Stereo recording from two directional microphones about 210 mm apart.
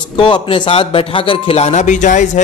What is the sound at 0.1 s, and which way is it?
Speech, 20° left (ahead or behind).